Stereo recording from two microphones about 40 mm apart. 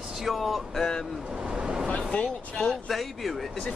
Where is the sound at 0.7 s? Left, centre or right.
Centre.